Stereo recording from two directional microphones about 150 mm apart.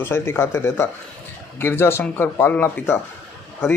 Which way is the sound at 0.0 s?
15° left (ahead or behind).